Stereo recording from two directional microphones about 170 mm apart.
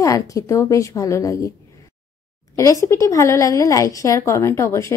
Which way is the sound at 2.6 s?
20° left (ahead or behind).